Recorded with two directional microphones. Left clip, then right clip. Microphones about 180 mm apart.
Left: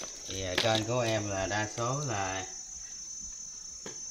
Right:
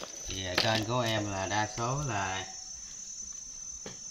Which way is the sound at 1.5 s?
30° left (ahead or behind).